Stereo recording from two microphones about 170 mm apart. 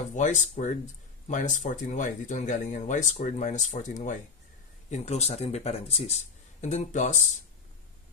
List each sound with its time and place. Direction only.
0.1 s speech: 45° left (ahead or behind)